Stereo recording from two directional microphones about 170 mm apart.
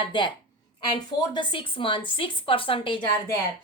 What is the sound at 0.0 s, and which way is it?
Speech, 30° left (ahead or behind).